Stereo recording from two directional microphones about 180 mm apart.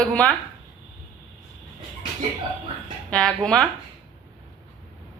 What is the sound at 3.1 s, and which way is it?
Speech, 5° left (ahead or behind).